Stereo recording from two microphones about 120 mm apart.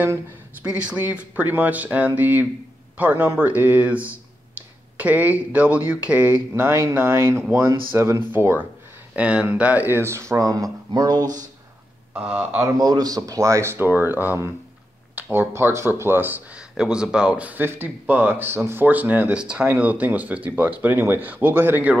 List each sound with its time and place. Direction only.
0.0 s speech: 15° right (ahead or behind); by 11.2 s 35° right (ahead or behind)
12.1 s speech: 10° right (ahead or behind)
12.6 s speech: 35° right (ahead or behind); by 21.9 s 15° right (ahead or behind)